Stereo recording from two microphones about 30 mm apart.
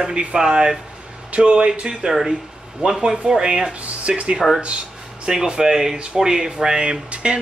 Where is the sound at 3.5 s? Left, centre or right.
Right.